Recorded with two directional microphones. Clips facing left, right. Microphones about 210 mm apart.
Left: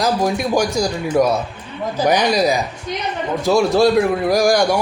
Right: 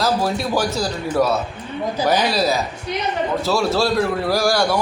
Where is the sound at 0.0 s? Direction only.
15° left (ahead or behind).